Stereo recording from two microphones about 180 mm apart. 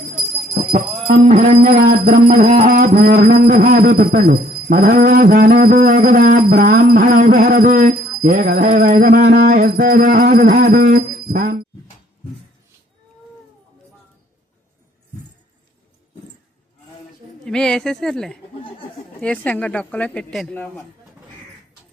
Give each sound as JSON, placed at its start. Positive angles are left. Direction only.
{"t": 1.3, "sound": "speech", "side_deg": -50}
{"t": 17.4, "sound": "speech", "side_deg": 5}